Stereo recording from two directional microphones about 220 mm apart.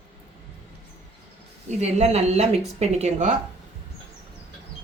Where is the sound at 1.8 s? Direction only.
30° right (ahead or behind).